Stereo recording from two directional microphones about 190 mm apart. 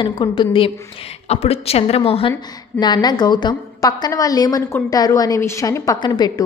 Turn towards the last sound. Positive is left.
turn(degrees=20)  # may be behind; listen again after turning